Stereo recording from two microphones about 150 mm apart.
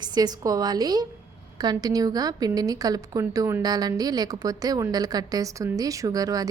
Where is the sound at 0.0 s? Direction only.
25° right (ahead or behind).